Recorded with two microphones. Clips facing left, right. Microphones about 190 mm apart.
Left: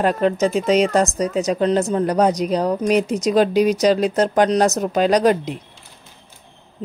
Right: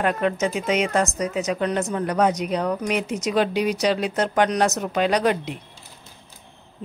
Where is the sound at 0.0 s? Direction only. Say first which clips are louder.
Left 4 dB; 35° left (ahead or behind).